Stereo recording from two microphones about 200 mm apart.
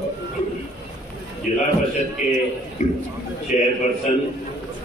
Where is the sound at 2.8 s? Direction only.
35° left (ahead or behind).